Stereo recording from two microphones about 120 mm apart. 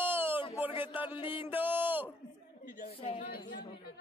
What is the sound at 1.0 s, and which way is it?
Music, 45° left (ahead or behind).